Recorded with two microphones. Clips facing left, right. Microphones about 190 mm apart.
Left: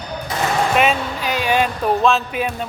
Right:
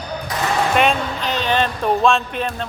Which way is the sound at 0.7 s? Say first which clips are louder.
Even; 5° left (ahead or behind).